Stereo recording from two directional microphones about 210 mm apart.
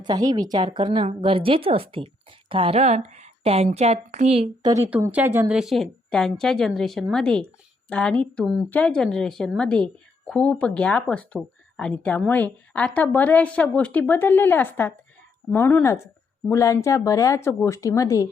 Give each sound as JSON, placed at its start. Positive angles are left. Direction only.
{"t": 0.0, "sound": "a woman's voice", "side_deg": -20}
{"t": 4.7, "sound": "speech", "side_deg": -10}